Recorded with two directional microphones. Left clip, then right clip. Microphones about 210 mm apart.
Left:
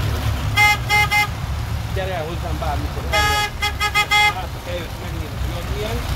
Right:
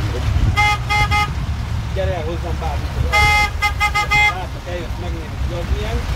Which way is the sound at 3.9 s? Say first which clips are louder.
Left 1 dB; 30° left (ahead or behind).